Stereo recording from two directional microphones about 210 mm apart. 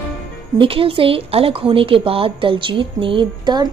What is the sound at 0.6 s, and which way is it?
A woman's voice, 25° right (ahead or behind).